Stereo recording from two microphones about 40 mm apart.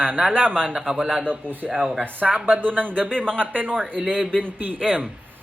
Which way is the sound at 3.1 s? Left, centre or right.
Left.